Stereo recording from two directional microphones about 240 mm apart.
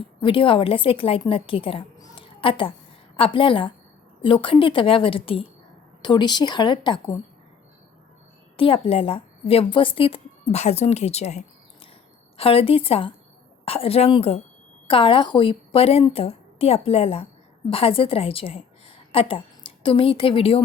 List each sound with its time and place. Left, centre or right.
0.2 s a woman's voice: left
8.5 s a woman's voice: left